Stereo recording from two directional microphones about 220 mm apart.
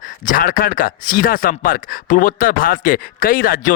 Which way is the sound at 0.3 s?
40° left (ahead or behind).